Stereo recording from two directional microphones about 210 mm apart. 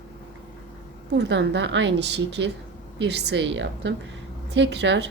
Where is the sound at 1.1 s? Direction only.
55° right (ahead or behind).